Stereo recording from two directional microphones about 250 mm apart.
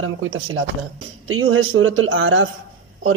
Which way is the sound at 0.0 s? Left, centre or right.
Right.